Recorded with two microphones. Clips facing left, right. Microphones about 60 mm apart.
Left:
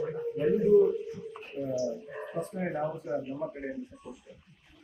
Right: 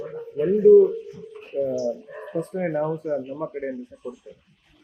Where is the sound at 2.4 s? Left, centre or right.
Right.